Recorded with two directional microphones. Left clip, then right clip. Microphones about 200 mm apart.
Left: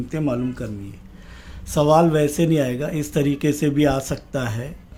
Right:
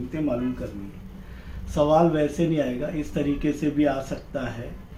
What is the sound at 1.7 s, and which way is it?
Speech, 60° left (ahead or behind).